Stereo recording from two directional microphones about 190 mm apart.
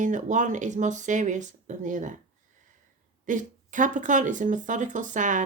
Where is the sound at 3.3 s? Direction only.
40° right (ahead or behind).